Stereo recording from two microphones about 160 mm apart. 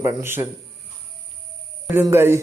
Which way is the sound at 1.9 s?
15° right (ahead or behind).